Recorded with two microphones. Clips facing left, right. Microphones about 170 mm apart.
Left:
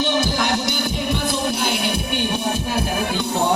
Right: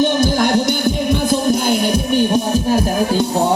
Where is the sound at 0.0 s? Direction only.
50° right (ahead or behind).